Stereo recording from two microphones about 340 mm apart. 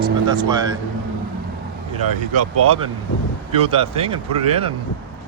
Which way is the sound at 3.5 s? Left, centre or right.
Centre.